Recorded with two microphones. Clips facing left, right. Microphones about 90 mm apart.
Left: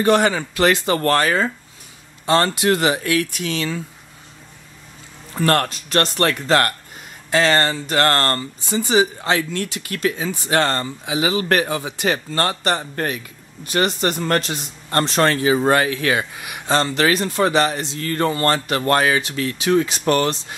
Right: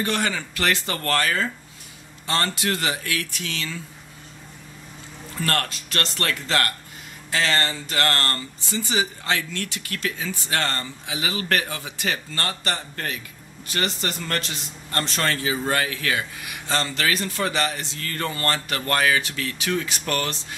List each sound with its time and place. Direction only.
0.0 s speech: 25° left (ahead or behind)
5.3 s speech: 30° left (ahead or behind)
7.2 s speech: 50° left (ahead or behind)
8.8 s speech: 25° left (ahead or behind)
14.9 s speech: 35° left (ahead or behind)
15.7 s speech: 30° left (ahead or behind)